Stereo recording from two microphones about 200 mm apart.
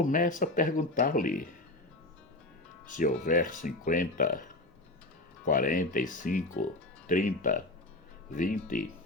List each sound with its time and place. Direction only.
0.0 s speech: 40° left (ahead or behind)
2.9 s speech: 40° left (ahead or behind)
5.5 s speech: 45° left (ahead or behind)